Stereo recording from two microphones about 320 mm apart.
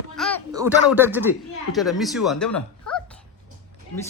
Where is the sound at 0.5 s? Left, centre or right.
Centre.